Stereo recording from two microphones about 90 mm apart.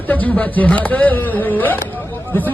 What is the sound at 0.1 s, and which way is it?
A man's voice, 20° left (ahead or behind).